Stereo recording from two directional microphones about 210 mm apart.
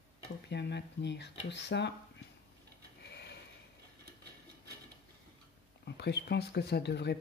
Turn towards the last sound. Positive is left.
turn(degrees=55)  # may be behind; listen again after turning